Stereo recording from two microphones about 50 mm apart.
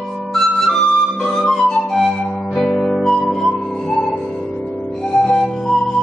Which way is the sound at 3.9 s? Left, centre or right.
Centre.